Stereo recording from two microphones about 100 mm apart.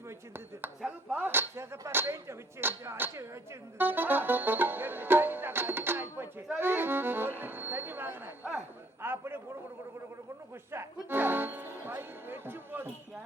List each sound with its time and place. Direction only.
0.8 s a sound: 15° right (ahead or behind)
3.8 s music: 20° right (ahead or behind)
10.7 s music: 20° right (ahead or behind)